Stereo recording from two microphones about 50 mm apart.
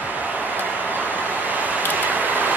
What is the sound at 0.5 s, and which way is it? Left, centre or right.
Vehicle, right.